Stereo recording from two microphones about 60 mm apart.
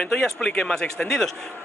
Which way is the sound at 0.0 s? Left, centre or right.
Centre.